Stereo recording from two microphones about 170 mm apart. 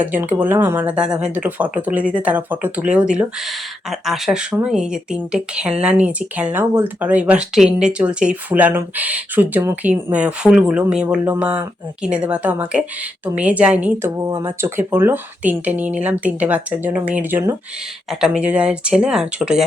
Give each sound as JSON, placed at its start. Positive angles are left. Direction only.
{"t": 0.0, "sound": "speech", "side_deg": -10}